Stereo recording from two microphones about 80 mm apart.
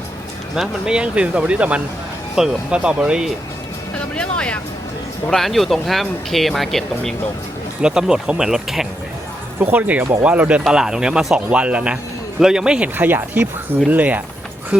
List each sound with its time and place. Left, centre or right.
0.5 s speech: centre
3.9 s speech: centre
5.3 s speech: centre
7.8 s speech: centre
9.6 s speech: centre
13.0 s speech: right